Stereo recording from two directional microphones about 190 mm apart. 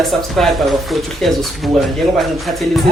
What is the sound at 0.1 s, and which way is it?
Speech, centre (ahead or behind).